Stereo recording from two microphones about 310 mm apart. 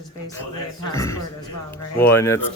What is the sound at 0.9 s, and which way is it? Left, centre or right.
Speech, centre.